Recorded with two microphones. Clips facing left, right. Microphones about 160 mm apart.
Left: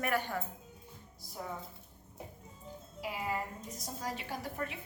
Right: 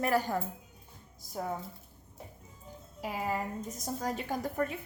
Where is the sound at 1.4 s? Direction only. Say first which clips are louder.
Right 6 dB; 50° right (ahead or behind).